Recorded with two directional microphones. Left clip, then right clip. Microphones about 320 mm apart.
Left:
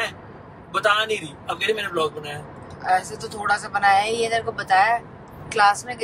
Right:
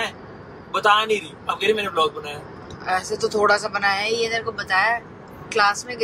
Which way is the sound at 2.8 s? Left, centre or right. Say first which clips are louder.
Left 1 dB; centre.